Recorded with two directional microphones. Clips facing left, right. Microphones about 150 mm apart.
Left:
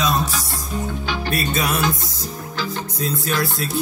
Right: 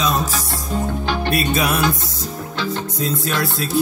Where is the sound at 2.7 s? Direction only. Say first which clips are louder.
Right 2 dB; 25° right (ahead or behind).